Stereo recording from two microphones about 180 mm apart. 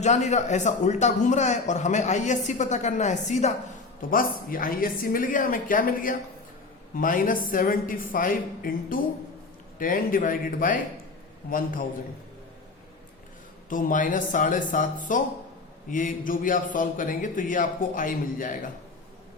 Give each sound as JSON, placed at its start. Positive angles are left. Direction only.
{"t": 0.0, "sound": "a man's voice", "side_deg": 40}
{"t": 4.1, "sound": "a man's voice", "side_deg": 50}
{"t": 13.7, "sound": "a man's voice", "side_deg": 45}